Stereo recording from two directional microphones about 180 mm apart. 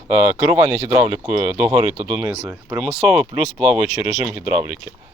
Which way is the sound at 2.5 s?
10° right (ahead or behind).